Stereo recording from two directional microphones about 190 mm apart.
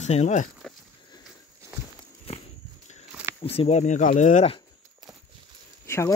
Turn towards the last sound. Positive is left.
turn(degrees=15)  # may be behind; listen again after turning